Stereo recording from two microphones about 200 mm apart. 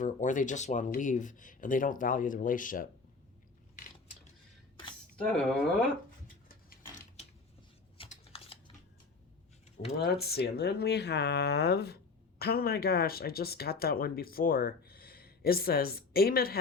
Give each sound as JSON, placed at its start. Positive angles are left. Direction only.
{"t": 0.0, "sound": "speech", "side_deg": 40}
{"t": 5.2, "sound": "speech", "side_deg": 5}
{"t": 7.9, "sound": "typing", "side_deg": 30}
{"t": 10.0, "sound": "speech", "side_deg": 50}